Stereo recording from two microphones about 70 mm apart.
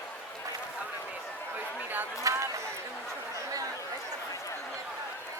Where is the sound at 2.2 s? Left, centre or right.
Right.